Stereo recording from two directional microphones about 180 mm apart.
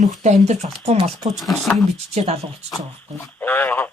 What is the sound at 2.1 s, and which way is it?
Speech, 35° right (ahead or behind).